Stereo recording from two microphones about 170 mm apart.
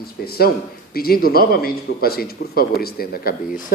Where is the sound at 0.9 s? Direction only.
60° left (ahead or behind).